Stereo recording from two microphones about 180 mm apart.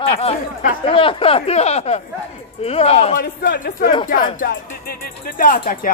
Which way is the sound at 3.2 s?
55° left (ahead or behind).